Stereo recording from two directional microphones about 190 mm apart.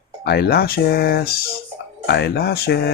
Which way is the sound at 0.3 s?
55° left (ahead or behind).